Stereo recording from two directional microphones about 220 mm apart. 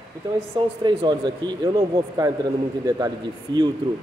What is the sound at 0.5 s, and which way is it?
Speech, 20° right (ahead or behind).